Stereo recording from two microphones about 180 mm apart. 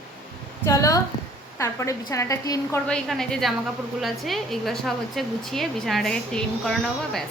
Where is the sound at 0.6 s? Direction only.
15° left (ahead or behind).